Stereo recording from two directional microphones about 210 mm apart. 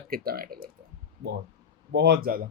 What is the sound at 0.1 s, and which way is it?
Speech, 45° right (ahead or behind).